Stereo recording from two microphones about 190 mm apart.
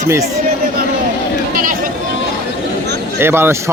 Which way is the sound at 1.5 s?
45° right (ahead or behind).